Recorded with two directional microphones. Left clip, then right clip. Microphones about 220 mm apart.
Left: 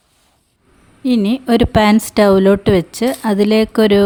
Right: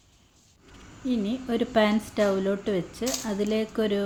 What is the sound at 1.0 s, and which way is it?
A woman's voice, 50° left (ahead or behind).